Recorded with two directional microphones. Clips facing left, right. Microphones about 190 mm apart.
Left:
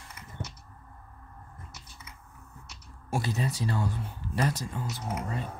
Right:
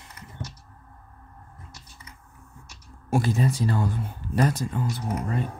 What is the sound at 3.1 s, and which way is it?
Speech, 50° right (ahead or behind).